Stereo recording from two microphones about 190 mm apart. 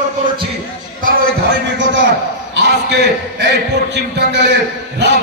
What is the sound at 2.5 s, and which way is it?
A man's voice, 60° right (ahead or behind).